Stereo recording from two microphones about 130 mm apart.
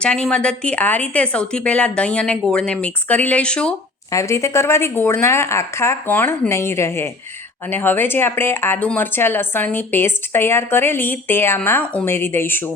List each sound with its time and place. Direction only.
0.0 s speech: 10° left (ahead or behind)
4.1 s speech: 20° left (ahead or behind)